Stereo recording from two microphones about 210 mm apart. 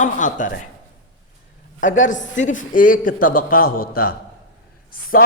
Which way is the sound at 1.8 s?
35° left (ahead or behind).